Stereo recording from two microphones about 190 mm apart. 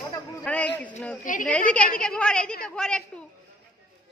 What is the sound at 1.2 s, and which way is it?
Speech, 45° left (ahead or behind).